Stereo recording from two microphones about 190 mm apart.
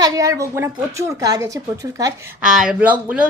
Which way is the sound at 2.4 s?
5° right (ahead or behind).